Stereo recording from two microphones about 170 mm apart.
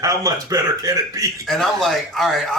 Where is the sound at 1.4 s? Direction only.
Centre (ahead or behind).